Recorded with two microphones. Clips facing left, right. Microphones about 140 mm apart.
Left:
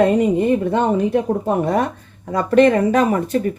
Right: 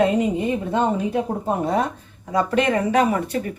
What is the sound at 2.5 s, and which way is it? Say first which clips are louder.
Speech: left 9 dB; 40° left (ahead or behind).